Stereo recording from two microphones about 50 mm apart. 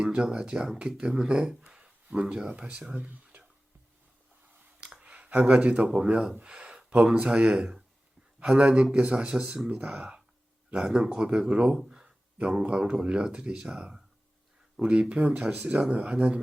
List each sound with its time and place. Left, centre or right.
0.0 s speech: centre
4.8 s a sound: centre
5.3 s speech: right; by 9.6 s centre
9.6 s speech: right
14.8 s speech: right